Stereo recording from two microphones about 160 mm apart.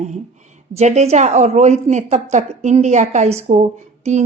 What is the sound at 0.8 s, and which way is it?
A woman's voice, 45° right (ahead or behind).